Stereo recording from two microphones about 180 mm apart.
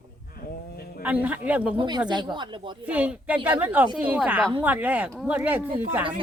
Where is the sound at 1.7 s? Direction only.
25° right (ahead or behind).